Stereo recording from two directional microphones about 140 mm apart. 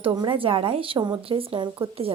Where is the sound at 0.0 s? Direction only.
35° right (ahead or behind).